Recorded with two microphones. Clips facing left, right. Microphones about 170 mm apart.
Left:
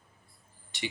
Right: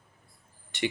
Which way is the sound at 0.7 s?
60° right (ahead or behind).